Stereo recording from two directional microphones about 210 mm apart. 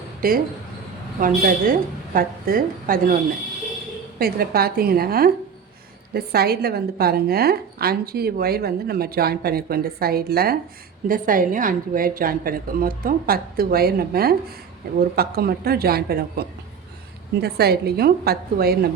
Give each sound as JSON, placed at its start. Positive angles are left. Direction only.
{"t": 0.2, "sound": "a woman's voice", "side_deg": -45}
{"t": 4.2, "sound": "a woman's voice", "side_deg": -45}